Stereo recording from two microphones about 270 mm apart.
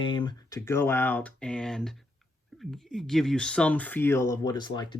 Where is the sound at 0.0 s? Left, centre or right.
Centre.